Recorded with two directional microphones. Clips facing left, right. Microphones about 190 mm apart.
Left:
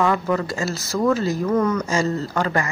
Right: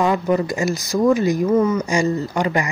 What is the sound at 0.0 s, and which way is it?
A woman's voice, 15° right (ahead or behind).